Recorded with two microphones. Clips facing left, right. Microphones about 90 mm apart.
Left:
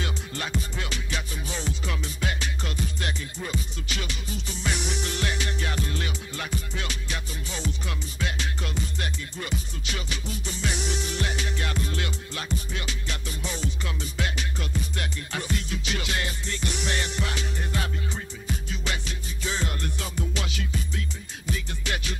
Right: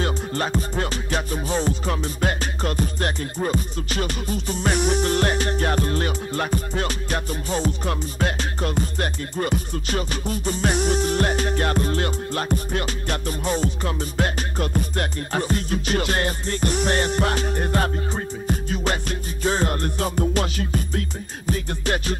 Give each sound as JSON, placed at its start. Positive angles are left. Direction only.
{"t": 0.0, "sound": "music", "side_deg": -45}